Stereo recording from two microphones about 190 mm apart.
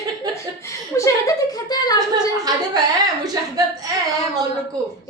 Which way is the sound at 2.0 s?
20° right (ahead or behind).